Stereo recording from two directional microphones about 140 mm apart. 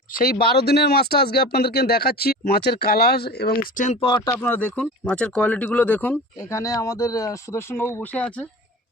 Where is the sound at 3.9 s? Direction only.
40° left (ahead or behind).